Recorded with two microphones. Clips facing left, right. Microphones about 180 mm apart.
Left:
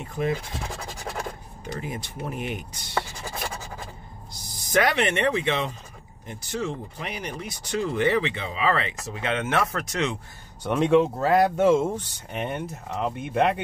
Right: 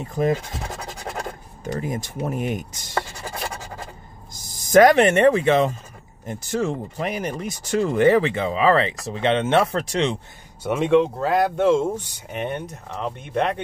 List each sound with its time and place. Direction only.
0.0 s speech: 40° right (ahead or behind)
1.6 s speech: 40° right (ahead or behind)
4.6 s speech: 45° right (ahead or behind); by 10.1 s 30° right (ahead or behind)
10.6 s speech: 5° right (ahead or behind)